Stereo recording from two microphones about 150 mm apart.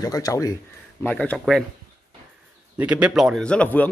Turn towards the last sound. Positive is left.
turn(degrees=10)  # may be behind; listen again after turning